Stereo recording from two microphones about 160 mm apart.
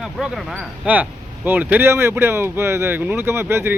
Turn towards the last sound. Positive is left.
turn(degrees=-15)  # may be behind; listen again after turning